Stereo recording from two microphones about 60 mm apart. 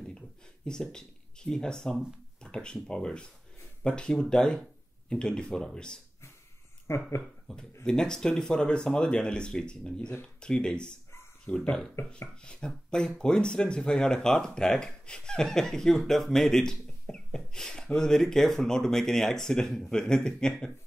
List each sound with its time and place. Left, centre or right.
0.7 s speech: centre
6.9 s speech: left
7.5 s speech: centre